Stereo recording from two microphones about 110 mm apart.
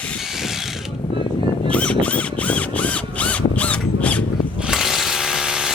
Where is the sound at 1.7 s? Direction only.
10° left (ahead or behind).